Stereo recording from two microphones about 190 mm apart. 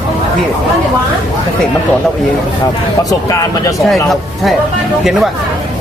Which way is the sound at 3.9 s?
Centre (ahead or behind).